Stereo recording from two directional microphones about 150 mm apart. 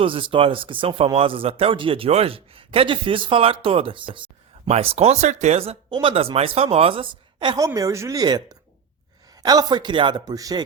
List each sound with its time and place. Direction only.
0.0 s speech: 35° right (ahead or behind)